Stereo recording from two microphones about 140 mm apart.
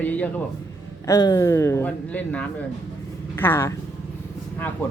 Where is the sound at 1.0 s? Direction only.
25° left (ahead or behind).